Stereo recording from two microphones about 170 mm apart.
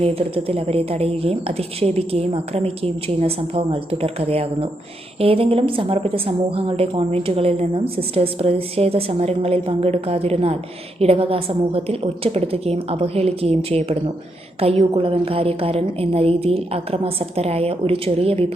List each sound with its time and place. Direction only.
0.0 s a woman's voice: 35° right (ahead or behind)